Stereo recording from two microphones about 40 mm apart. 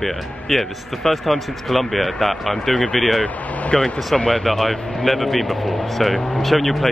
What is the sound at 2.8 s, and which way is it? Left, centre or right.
Speech, left.